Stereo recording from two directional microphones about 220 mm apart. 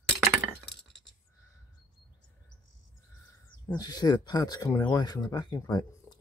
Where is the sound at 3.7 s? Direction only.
20° left (ahead or behind).